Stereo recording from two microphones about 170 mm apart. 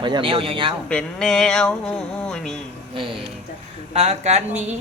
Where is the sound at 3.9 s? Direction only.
35° right (ahead or behind).